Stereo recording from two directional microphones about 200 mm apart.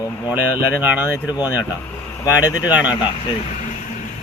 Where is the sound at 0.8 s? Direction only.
10° right (ahead or behind).